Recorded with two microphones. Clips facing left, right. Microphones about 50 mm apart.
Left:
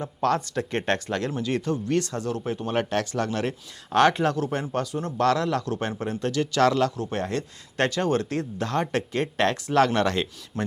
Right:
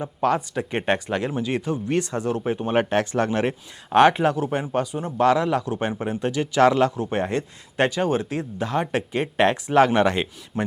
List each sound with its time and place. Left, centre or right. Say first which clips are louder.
0.0 s speech: right 2 dB; centre